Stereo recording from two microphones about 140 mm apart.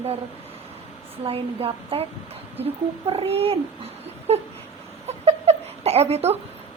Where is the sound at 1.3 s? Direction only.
45° right (ahead or behind).